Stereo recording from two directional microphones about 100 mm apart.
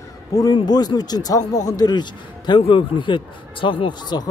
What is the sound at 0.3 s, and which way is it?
Speech, 40° left (ahead or behind).